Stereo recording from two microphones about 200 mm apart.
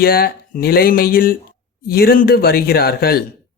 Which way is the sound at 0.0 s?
50° left (ahead or behind).